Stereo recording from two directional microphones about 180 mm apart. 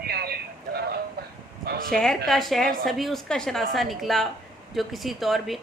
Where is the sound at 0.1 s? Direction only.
60° right (ahead or behind).